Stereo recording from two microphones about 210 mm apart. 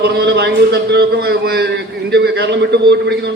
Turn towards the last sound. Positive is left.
turn(degrees=-55)  # may be behind; listen again after turning